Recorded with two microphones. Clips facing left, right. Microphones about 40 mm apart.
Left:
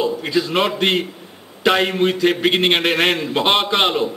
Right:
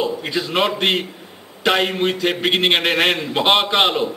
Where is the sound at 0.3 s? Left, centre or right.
Centre.